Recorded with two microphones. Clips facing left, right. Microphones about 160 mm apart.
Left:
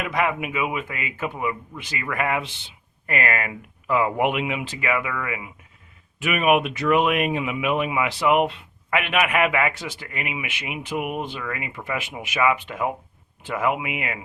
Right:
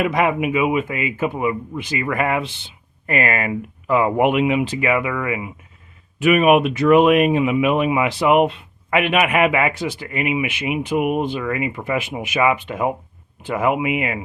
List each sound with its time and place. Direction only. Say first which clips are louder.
0.0 s speech: right 6 dB; 20° right (ahead or behind)
2.0 s speech: right 3 dB; 35° right (ahead or behind)